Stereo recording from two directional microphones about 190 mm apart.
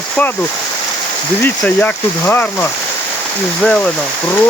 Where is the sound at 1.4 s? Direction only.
10° left (ahead or behind).